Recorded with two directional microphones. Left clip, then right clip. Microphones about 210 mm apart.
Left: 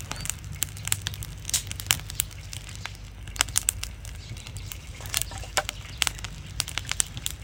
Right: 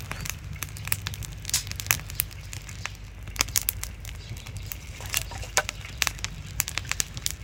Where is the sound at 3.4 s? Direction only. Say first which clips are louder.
Left 1 dB; 10° right (ahead or behind).